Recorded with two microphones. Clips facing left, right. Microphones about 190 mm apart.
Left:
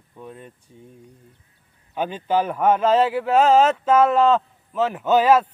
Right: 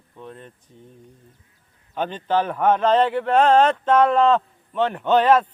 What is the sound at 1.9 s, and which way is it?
A man's voice, 10° left (ahead or behind).